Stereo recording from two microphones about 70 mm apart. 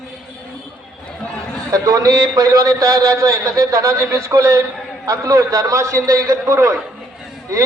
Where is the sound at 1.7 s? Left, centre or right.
Right.